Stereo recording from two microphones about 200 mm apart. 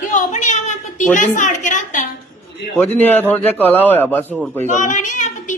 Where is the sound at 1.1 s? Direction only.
40° left (ahead or behind).